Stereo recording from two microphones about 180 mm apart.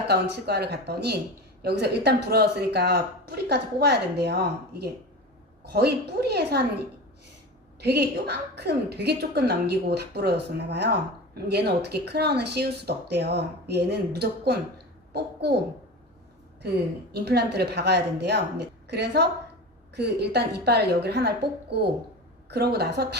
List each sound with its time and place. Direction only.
0.1 s speech: 65° right (ahead or behind)
7.8 s a child's voice: 65° right (ahead or behind)
17.1 s a woman's voice: 65° right (ahead or behind)